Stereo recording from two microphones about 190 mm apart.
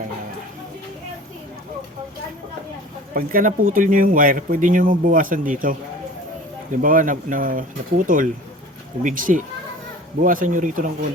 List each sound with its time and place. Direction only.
3.2 s speech: 50° right (ahead or behind)
6.8 s speech: 45° right (ahead or behind)